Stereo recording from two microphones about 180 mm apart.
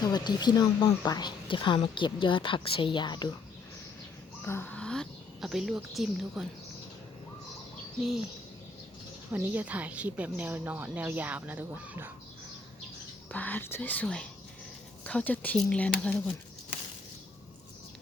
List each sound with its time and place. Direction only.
0.0 s a woman's voice: 25° left (ahead or behind)
4.4 s a woman's voice: 10° left (ahead or behind)
9.3 s a woman's voice: 10° right (ahead or behind)
13.3 s speech: 10° left (ahead or behind)